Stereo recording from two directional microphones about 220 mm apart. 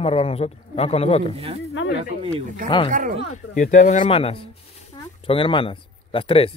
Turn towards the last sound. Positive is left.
turn(degrees=25)  # may be behind; listen again after turning